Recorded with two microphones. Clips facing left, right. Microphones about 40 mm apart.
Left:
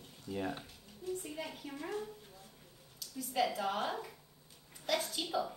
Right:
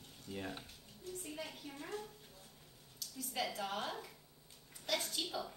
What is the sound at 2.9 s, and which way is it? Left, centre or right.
Speech, centre.